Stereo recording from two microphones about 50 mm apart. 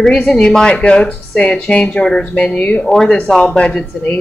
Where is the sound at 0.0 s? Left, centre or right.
Centre.